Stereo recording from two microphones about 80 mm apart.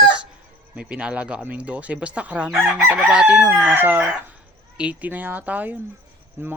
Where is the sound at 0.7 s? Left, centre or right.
Centre.